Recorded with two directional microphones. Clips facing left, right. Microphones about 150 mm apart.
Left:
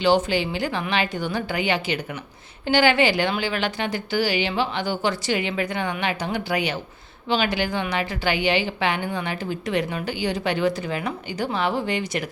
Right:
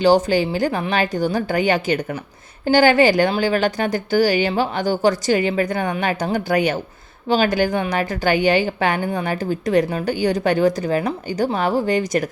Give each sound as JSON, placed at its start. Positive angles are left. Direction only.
{"t": 0.0, "sound": "a woman's voice", "side_deg": -40}